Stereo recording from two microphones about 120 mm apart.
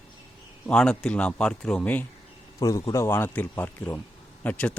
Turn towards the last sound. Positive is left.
turn(degrees=10)  # may be behind; listen again after turning